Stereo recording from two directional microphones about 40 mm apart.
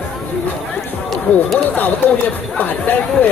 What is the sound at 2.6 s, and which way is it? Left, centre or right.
Speech, left.